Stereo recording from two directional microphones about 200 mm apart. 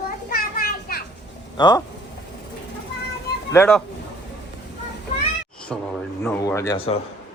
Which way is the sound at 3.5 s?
10° left (ahead or behind).